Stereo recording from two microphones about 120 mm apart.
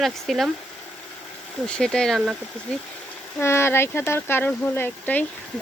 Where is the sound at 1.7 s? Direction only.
5° left (ahead or behind).